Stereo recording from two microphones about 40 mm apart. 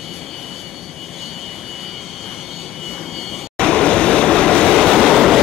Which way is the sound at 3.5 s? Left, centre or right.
Left.